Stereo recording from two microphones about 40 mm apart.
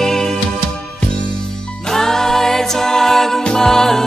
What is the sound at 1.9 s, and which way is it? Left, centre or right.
Music, centre.